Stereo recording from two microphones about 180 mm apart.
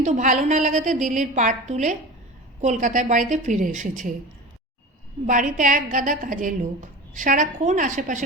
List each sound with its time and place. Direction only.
0.0 s a woman's voice: 40° right (ahead or behind)
5.2 s a woman's voice: 45° right (ahead or behind)